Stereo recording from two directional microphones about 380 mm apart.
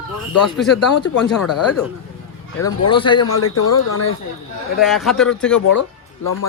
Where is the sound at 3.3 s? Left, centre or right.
Left.